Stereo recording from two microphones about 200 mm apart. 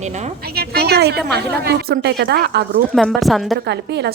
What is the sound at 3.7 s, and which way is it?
Speech, 55° right (ahead or behind).